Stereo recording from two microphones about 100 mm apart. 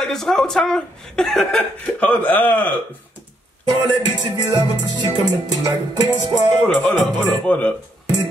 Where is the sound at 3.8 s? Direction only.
45° right (ahead or behind).